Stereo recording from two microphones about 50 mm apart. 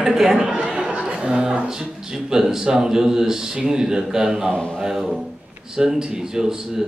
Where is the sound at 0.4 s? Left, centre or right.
Centre.